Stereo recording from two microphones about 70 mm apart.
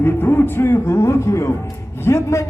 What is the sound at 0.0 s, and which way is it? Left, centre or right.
A man's voice, left.